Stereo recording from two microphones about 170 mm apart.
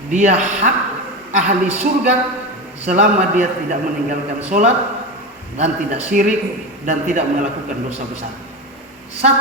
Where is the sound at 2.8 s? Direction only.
45° right (ahead or behind).